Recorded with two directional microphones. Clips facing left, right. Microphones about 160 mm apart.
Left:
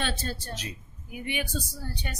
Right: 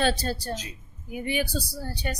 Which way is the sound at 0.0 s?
40° right (ahead or behind).